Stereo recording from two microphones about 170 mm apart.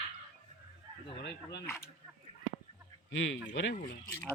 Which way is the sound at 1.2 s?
75° left (ahead or behind).